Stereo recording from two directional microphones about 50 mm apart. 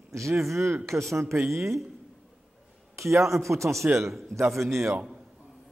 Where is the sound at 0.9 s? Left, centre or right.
Right.